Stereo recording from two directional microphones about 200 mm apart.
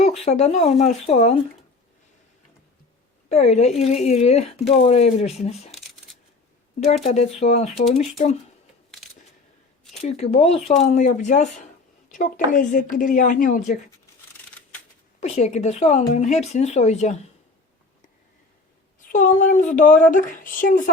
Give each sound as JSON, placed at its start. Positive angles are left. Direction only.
{"t": 0.0, "sound": "speech", "side_deg": 30}
{"t": 3.2, "sound": "a woman's voice", "side_deg": 30}
{"t": 6.7, "sound": "speech", "side_deg": 30}
{"t": 10.0, "sound": "speech", "side_deg": 30}
{"t": 15.2, "sound": "speech", "side_deg": 35}
{"t": 19.0, "sound": "speech", "side_deg": 40}